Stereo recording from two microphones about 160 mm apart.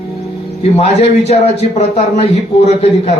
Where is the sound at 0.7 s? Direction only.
45° left (ahead or behind).